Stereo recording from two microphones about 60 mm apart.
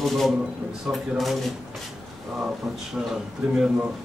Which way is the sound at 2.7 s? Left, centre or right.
Centre.